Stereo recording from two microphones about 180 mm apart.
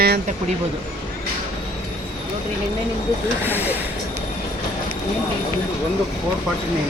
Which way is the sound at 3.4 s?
10° right (ahead or behind).